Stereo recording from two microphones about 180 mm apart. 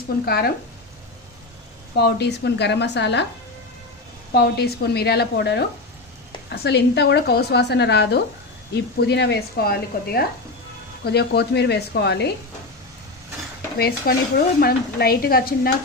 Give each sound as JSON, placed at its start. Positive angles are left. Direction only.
{"t": 0.2, "sound": "a woman's voice", "side_deg": 60}
{"t": 2.0, "sound": "a woman's voice", "side_deg": 65}
{"t": 4.3, "sound": "a woman's voice", "side_deg": 60}
{"t": 13.7, "sound": "a woman's voice", "side_deg": 60}